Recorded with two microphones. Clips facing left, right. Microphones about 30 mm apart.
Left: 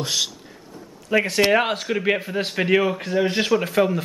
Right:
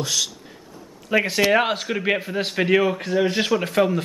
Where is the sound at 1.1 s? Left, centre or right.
Centre.